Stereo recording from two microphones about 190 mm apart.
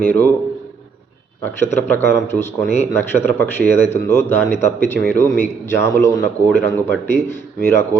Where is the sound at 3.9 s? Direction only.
10° left (ahead or behind).